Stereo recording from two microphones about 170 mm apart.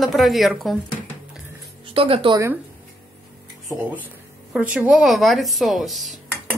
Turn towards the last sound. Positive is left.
turn(degrees=0)  # may be behind; listen again after turning